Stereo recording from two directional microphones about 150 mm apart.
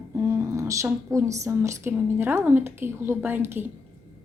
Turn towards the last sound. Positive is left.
turn(degrees=-15)  # may be behind; listen again after turning